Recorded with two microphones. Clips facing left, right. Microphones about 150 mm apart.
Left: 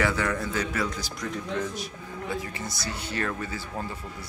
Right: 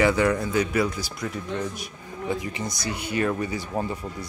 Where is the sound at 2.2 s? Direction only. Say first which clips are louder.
Right 5 dB; 20° right (ahead or behind).